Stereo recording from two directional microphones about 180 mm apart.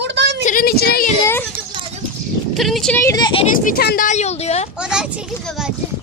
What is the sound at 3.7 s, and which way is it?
Speech, 55° left (ahead or behind).